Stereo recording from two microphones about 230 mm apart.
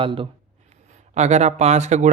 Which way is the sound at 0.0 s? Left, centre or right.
Right.